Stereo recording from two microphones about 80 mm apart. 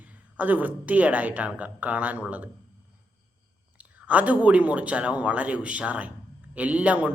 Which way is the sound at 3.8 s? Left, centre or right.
Centre.